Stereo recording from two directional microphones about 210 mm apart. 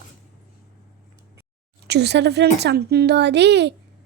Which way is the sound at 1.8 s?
55° right (ahead or behind).